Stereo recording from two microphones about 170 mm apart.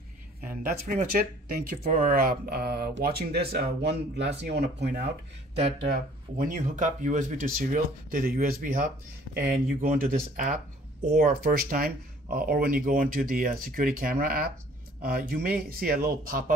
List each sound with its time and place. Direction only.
0.5 s speech: 55° right (ahead or behind); by 5.0 s 75° right (ahead or behind)
5.9 s speech: 55° right (ahead or behind)